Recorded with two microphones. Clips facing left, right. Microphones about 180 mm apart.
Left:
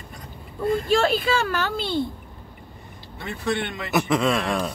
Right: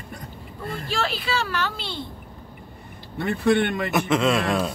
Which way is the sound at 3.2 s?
55° right (ahead or behind).